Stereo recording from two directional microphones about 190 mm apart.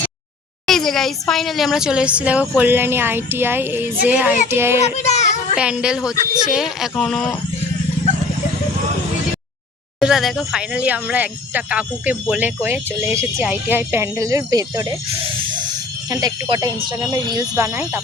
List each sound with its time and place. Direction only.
0.7 s speech: centre (ahead or behind)
4.8 s a sound: 35° left (ahead or behind)
5.5 s speech: 5° right (ahead or behind)
10.0 s speech: centre (ahead or behind); by 14.9 s 20° right (ahead or behind)
16.0 s speech: 20° right (ahead or behind)